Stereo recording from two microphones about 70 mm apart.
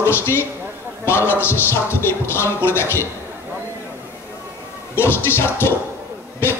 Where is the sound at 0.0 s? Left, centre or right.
Left.